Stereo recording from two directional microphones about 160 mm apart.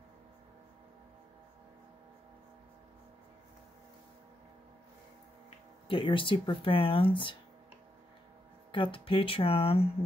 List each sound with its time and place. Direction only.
5.9 s speech: 30° left (ahead or behind)
8.7 s speech: 30° left (ahead or behind)